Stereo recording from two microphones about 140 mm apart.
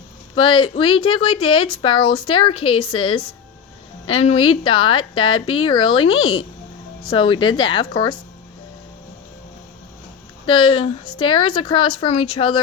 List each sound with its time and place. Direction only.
0.3 s speech: 35° left (ahead or behind)
10.4 s speech: 40° left (ahead or behind)